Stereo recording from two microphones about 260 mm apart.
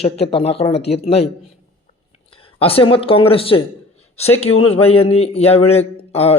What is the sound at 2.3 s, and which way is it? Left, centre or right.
Speech, left.